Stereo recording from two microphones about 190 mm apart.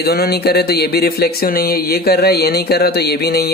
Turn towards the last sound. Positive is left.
turn(degrees=55)  # may be behind; listen again after turning